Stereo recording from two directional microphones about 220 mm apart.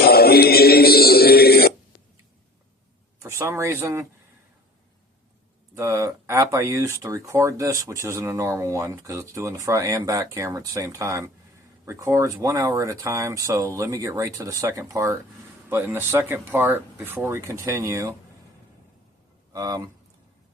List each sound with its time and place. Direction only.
0.0 s music: 45° left (ahead or behind)
3.2 s speech: 10° right (ahead or behind)
5.7 s speech: 15° right (ahead or behind)
19.5 s speech: 15° right (ahead or behind)